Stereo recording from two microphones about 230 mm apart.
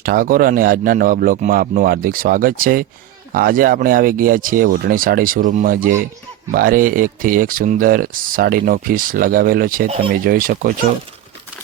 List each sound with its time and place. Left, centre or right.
0.0 s speech: right